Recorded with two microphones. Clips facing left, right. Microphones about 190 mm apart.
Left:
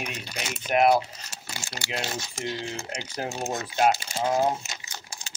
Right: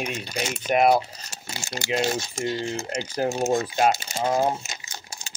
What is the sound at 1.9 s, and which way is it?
Speech, 45° right (ahead or behind).